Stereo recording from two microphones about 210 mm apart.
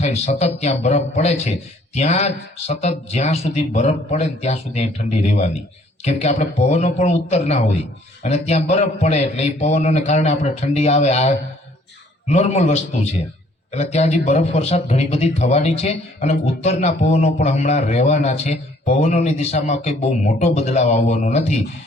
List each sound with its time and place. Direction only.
0.0 s a man's voice: 30° left (ahead or behind)